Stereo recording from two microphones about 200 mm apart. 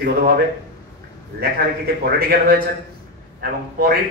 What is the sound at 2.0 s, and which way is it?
A man's voice, 50° right (ahead or behind).